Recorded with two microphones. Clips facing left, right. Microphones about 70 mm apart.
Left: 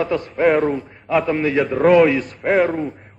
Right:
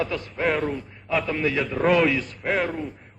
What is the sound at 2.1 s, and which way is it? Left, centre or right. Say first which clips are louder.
Speech: left 6 dB; left.